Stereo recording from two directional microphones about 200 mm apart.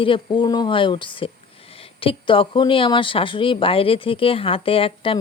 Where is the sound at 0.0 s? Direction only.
25° left (ahead or behind).